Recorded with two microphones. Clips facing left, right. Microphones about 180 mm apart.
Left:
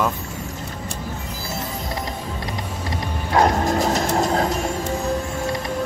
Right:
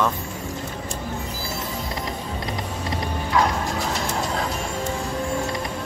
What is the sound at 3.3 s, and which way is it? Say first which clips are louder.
Music: left 5 dB; 45° left (ahead or behind).